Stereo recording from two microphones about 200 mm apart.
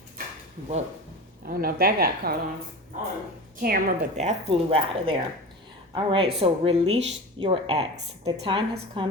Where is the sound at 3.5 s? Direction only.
50° right (ahead or behind).